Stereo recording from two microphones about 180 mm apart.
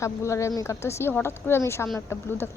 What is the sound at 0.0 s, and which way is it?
Speech, 15° left (ahead or behind).